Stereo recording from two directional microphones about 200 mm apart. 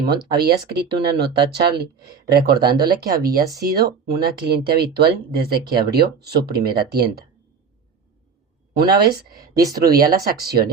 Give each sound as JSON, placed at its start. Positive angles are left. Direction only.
{"t": 0.0, "sound": "speech", "side_deg": -50}
{"t": 8.7, "sound": "speech", "side_deg": -50}